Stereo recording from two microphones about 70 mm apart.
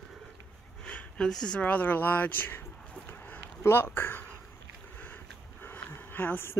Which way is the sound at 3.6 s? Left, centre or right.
Left.